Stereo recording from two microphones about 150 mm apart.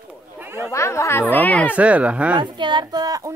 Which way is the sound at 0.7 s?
20° left (ahead or behind).